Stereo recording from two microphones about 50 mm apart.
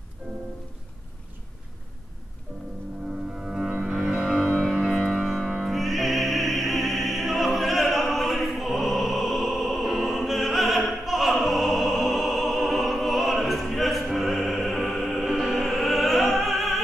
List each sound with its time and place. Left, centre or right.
3.3 s music: centre
4.9 s music: centre